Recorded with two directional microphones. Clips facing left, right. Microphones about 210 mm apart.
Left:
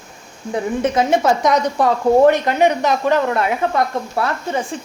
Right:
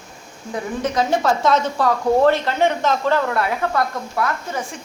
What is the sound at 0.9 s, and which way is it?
A woman's voice, 20° left (ahead or behind).